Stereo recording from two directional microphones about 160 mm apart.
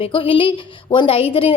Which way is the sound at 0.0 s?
35° left (ahead or behind).